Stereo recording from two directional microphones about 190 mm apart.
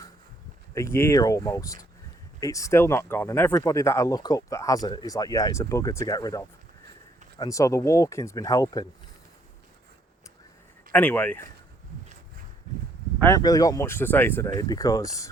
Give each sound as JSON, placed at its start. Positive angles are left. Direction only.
{"t": 0.7, "sound": "speech", "side_deg": 15}
{"t": 10.9, "sound": "speech", "side_deg": 10}
{"t": 13.1, "sound": "speech", "side_deg": 15}